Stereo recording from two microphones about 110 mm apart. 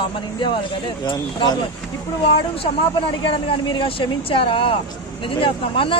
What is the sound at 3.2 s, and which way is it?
A woman's voice, 50° left (ahead or behind).